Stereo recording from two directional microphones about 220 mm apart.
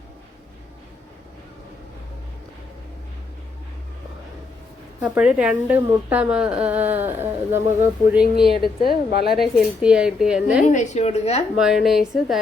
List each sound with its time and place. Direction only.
4.9 s a woman's voice: 5° right (ahead or behind)
9.0 s a woman's voice: 45° left (ahead or behind)
9.4 s a woman's voice: centre (ahead or behind)
10.7 s a woman's voice: 30° left (ahead or behind)
11.5 s a woman's voice: centre (ahead or behind)